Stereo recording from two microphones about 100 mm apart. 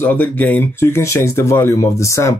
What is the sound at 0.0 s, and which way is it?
Speech, 20° left (ahead or behind).